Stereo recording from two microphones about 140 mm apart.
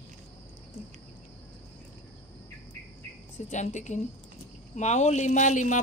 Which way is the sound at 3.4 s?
55° left (ahead or behind).